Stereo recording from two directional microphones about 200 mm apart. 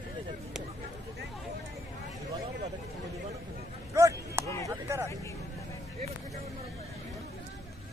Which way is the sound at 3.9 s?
15° right (ahead or behind).